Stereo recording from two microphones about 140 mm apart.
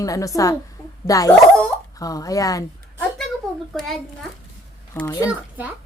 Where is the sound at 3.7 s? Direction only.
5° left (ahead or behind).